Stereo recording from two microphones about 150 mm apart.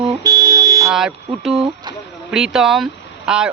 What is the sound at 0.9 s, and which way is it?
Speech, centre (ahead or behind).